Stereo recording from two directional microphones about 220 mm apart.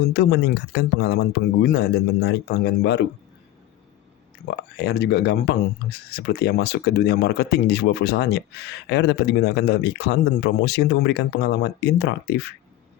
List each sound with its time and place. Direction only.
0.0 s speech: 50° left (ahead or behind)
4.8 s speech: 50° left (ahead or behind)